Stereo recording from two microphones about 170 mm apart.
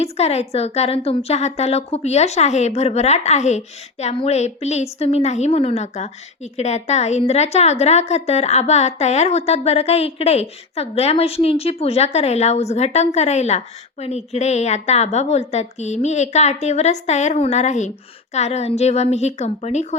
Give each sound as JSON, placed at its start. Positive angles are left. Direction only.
{"t": 0.0, "sound": "a woman's voice", "side_deg": 40}